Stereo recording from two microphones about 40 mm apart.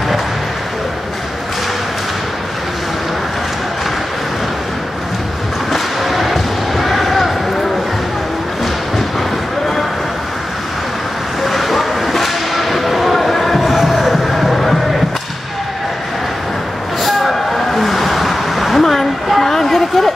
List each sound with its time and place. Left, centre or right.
5.7 s a sound: centre
11.4 s whip: centre
17.0 s train: centre